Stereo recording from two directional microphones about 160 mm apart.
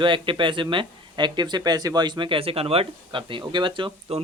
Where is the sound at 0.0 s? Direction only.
30° right (ahead or behind).